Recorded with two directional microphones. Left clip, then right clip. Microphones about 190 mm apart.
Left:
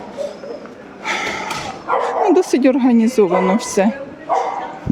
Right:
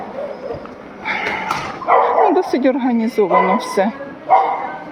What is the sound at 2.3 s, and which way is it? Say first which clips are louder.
Speech: left 2 dB; 40° left (ahead or behind).